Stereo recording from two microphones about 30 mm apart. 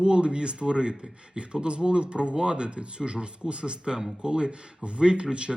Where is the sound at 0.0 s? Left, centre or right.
Right.